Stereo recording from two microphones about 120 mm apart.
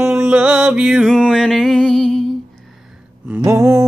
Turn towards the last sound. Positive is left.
turn(degrees=-25)  # may be behind; listen again after turning